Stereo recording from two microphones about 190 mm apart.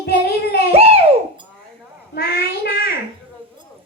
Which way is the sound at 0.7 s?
30° right (ahead or behind).